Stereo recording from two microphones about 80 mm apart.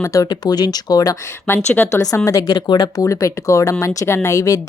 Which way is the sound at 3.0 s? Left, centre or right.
Left.